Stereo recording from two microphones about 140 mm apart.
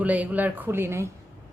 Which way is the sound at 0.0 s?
10° right (ahead or behind).